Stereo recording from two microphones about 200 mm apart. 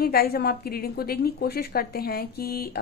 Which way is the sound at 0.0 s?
50° left (ahead or behind).